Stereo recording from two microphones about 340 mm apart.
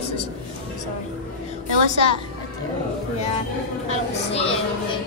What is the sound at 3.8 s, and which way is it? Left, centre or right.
Speech, centre.